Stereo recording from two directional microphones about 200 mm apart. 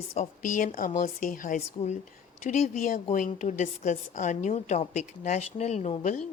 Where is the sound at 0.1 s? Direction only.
35° left (ahead or behind).